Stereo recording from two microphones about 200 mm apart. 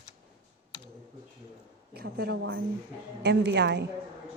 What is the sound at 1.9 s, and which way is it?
A woman's voice, 50° right (ahead or behind).